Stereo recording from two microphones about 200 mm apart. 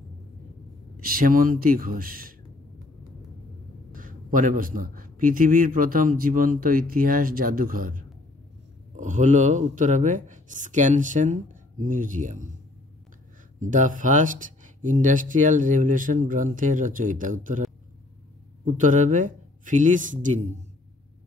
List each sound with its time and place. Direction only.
1.0 s a man's voice: 45° right (ahead or behind)
3.9 s a man's voice: 40° right (ahead or behind)
13.6 s speech: 40° right (ahead or behind)
18.7 s speech: 40° right (ahead or behind)